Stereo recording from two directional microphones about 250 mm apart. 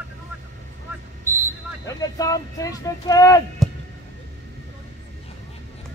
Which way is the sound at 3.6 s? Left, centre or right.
Centre.